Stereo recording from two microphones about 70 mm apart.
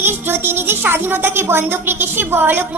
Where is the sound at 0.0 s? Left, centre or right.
Right.